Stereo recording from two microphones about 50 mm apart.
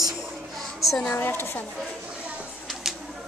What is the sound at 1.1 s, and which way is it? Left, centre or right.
Speech, left.